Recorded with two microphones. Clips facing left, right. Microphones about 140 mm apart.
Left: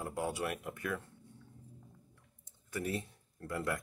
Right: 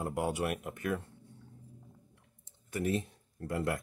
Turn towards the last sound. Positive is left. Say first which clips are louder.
# right 3 dB
turn(degrees=-20)  # may be behind; listen again after turning